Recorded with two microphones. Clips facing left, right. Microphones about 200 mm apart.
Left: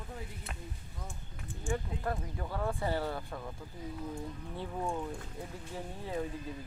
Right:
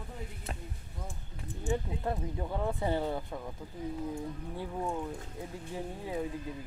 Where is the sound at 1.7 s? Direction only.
20° right (ahead or behind).